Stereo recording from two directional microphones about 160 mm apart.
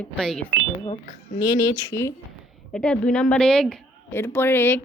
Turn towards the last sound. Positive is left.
turn(degrees=15)  # may be behind; listen again after turning